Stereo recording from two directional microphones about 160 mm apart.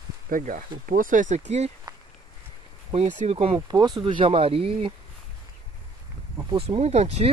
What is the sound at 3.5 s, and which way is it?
Speech, 25° right (ahead or behind).